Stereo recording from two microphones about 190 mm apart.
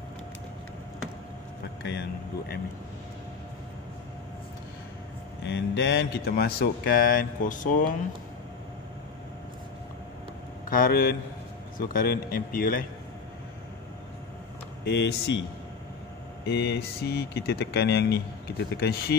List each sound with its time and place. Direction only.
1.8 s speech: 65° left (ahead or behind)
5.4 s speech: 70° left (ahead or behind); by 7.8 s 45° left (ahead or behind)
10.7 s speech: 50° left (ahead or behind)
14.9 s speech: 65° left (ahead or behind)
16.4 s speech: 60° left (ahead or behind)